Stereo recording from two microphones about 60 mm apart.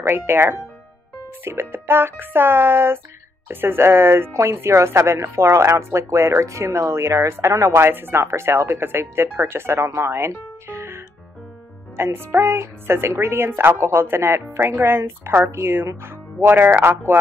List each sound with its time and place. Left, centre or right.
0.0 s speech: right
7.8 s speech: right
12.0 s speech: right